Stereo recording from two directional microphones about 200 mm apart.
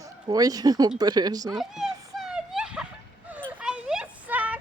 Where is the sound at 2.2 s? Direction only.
5° right (ahead or behind).